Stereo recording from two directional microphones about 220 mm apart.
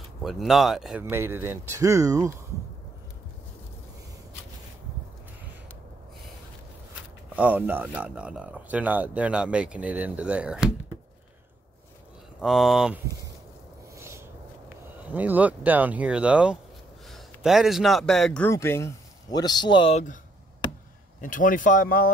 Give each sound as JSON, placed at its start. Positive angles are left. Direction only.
{"t": 0.2, "sound": "speech", "side_deg": 0}
{"t": 7.3, "sound": "speech", "side_deg": -5}
{"t": 12.4, "sound": "speech", "side_deg": 0}
{"t": 13.9, "sound": "a sound", "side_deg": -10}
{"t": 15.0, "sound": "a man's voice", "side_deg": -5}
{"t": 21.2, "sound": "speech", "side_deg": 35}